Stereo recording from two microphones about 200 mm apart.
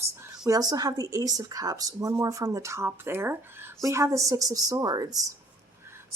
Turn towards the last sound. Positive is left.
turn(degrees=-15)  # may be behind; listen again after turning